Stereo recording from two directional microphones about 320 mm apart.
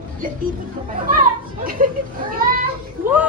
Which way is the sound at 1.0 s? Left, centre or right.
Right.